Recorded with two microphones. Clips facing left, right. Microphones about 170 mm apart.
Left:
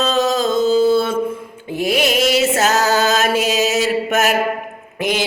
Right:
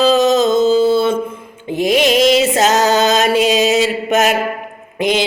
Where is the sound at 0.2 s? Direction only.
20° right (ahead or behind).